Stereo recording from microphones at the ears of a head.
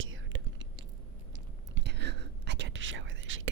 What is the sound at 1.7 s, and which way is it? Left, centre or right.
Whispering, right.